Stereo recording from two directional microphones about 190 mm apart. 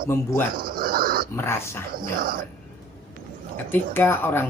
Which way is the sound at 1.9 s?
50° right (ahead or behind).